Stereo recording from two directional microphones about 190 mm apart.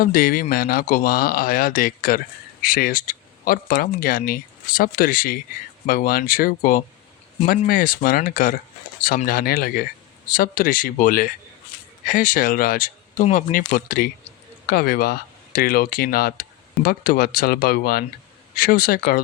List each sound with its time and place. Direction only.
0.0 s speech: 50° left (ahead or behind)